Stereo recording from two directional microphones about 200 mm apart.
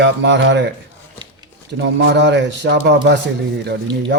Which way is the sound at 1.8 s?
60° right (ahead or behind).